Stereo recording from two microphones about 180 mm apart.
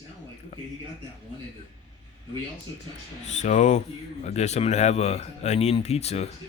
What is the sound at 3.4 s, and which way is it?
Speech, 40° left (ahead or behind).